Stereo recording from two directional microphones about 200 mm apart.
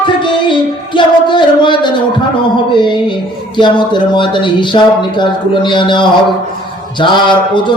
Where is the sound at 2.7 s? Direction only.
25° left (ahead or behind).